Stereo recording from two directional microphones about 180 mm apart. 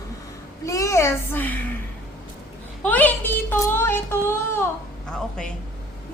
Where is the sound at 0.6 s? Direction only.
15° left (ahead or behind).